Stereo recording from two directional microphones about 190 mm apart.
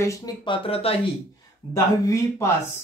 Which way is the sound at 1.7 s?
15° left (ahead or behind).